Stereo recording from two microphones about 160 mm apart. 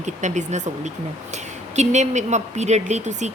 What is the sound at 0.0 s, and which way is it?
Speech, 50° right (ahead or behind).